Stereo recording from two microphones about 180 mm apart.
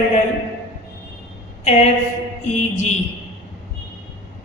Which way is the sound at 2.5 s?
40° left (ahead or behind).